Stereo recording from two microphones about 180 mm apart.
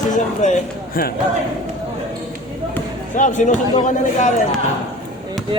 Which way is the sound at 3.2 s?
45° left (ahead or behind).